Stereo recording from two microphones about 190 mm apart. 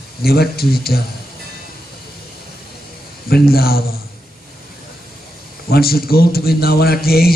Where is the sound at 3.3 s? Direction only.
55° left (ahead or behind).